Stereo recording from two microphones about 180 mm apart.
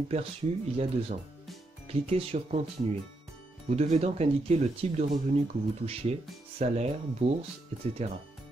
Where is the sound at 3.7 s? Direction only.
35° right (ahead or behind).